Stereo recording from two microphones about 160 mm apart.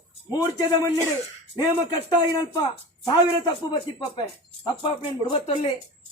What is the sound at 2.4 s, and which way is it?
Speech, 25° left (ahead or behind).